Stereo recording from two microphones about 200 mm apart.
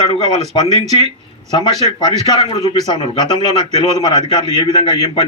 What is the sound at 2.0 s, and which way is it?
Speech, 20° left (ahead or behind).